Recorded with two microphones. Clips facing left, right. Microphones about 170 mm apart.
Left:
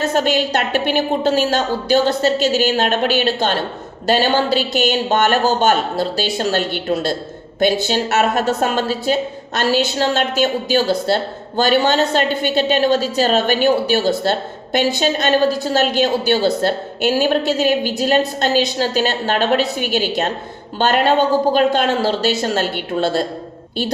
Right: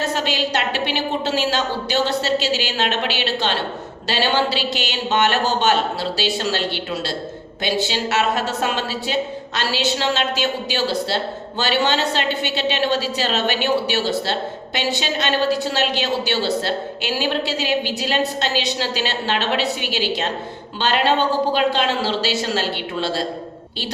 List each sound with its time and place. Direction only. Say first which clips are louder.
0.1 s a woman's voice: left 5 dB; 50° left (ahead or behind)